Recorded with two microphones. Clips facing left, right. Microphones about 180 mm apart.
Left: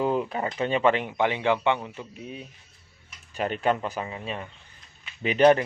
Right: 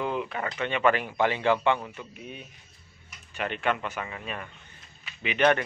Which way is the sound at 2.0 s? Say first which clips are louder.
Left 3 dB; 30° left (ahead or behind).